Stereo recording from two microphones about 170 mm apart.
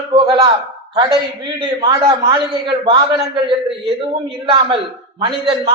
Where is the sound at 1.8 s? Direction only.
25° right (ahead or behind).